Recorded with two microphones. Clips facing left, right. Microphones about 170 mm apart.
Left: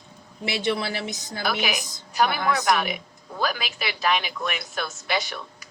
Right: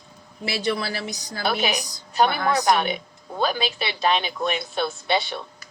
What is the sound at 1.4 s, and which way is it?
A woman's voice, 30° right (ahead or behind).